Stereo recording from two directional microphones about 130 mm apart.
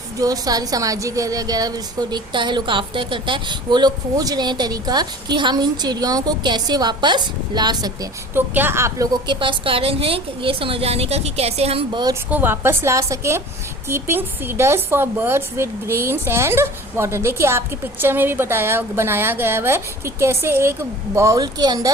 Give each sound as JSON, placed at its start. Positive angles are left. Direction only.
{"t": 0.2, "sound": "a woman's voice", "side_deg": -30}
{"t": 8.4, "sound": "a woman's voice", "side_deg": -15}
{"t": 9.2, "sound": "a woman's voice", "side_deg": -35}
{"t": 11.9, "sound": "a woman's voice", "side_deg": -35}
{"t": 12.3, "sound": "a woman's voice", "side_deg": -15}